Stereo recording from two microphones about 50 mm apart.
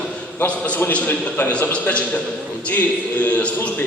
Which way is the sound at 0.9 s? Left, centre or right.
Left.